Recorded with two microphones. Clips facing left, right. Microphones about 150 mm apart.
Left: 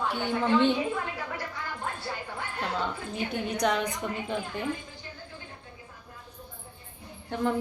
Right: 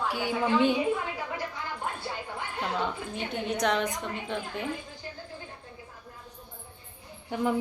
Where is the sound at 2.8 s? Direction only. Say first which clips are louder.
Even; centre (ahead or behind).